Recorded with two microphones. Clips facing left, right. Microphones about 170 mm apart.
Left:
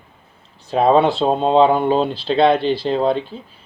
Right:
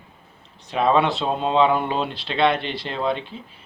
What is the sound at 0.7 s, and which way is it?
Speech, 35° left (ahead or behind).